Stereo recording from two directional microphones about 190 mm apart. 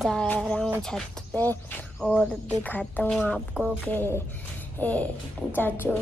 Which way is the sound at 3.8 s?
10° left (ahead or behind).